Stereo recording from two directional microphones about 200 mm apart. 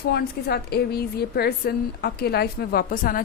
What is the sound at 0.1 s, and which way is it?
A woman's voice, 50° left (ahead or behind).